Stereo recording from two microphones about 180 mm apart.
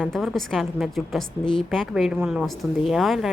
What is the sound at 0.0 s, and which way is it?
Speech, centre (ahead or behind).